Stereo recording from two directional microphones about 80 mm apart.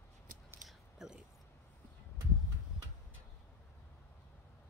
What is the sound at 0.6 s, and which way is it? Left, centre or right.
Biting, centre.